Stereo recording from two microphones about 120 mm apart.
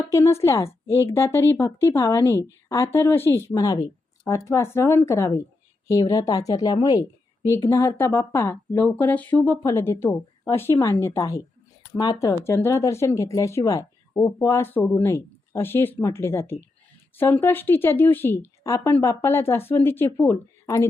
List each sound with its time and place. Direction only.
0.1 s speech: 25° left (ahead or behind)
3.5 s speech: 30° left (ahead or behind); by 9.4 s 15° left (ahead or behind)
9.4 s speech: 25° left (ahead or behind)
12.5 s a woman's voice: 20° left (ahead or behind)